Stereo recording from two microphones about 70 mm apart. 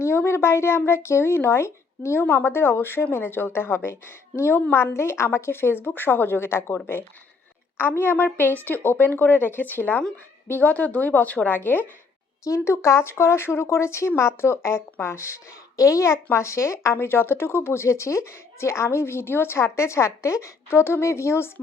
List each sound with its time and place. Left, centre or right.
0.0 s a woman's voice: left
12.5 s speech: left